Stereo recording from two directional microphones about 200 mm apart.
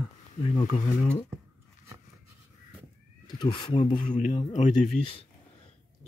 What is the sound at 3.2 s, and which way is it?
Speech, 25° left (ahead or behind).